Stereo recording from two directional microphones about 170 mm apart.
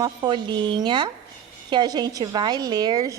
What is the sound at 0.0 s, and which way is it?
A woman's voice, 25° right (ahead or behind).